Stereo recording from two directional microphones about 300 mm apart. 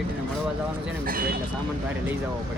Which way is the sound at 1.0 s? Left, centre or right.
Right.